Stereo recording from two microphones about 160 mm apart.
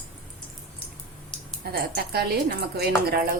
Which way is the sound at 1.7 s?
75° right (ahead or behind).